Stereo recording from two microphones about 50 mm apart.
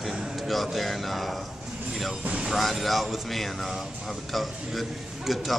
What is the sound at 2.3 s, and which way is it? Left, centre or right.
A man's voice, centre.